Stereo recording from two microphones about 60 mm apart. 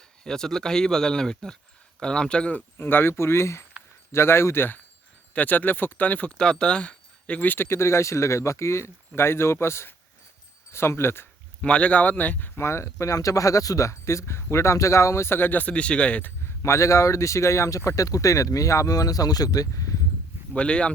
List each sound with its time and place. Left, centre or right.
0.3 s speech: centre
2.7 s speech: left
6.3 s speech: centre; by 11.3 s left
11.6 s speech: left
12.5 s speech: left
15.7 s speech: centre
16.6 s speech: left
20.6 s speech: centre